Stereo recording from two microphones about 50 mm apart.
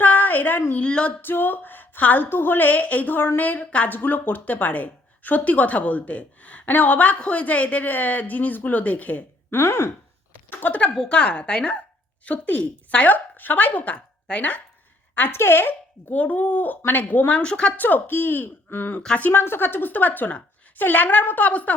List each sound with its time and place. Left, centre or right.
0.0 s a sound: left
0.8 s a woman's voice: left
1.2 s a sound: left
2.2 s a woman's voice: left
9.5 s speech: left
10.5 s speech: left
10.9 s a woman's voice: centre
15.3 s a woman's voice: left
17.4 s a woman's voice: left
17.7 s a woman's voice: left